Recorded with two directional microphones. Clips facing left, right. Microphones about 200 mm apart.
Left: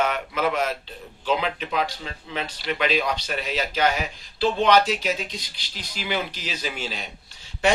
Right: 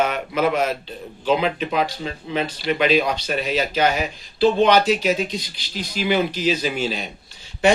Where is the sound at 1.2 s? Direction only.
15° right (ahead or behind).